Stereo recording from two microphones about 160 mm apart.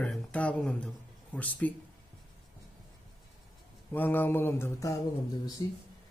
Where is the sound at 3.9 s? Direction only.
10° left (ahead or behind).